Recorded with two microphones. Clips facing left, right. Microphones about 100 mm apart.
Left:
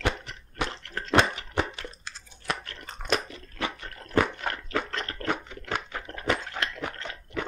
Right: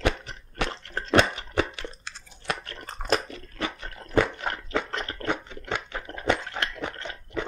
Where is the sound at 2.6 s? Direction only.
40° right (ahead or behind).